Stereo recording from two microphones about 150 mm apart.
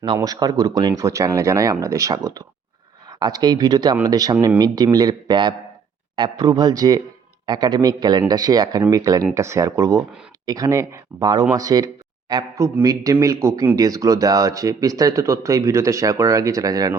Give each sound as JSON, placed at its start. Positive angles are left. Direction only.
{"t": 0.0, "sound": "speech", "side_deg": -30}